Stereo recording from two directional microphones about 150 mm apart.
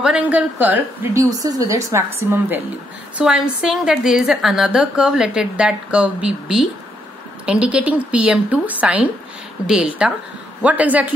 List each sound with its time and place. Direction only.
0.0 s a woman's voice: 10° right (ahead or behind)
1.4 s a woman's voice: 25° right (ahead or behind)